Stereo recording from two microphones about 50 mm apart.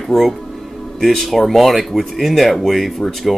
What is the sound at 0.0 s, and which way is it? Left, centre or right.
Speech, centre.